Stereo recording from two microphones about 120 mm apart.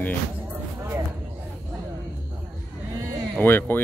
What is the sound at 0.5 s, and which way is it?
Music, 20° right (ahead or behind).